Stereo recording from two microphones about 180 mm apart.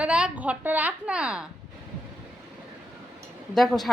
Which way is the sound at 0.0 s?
5° right (ahead or behind).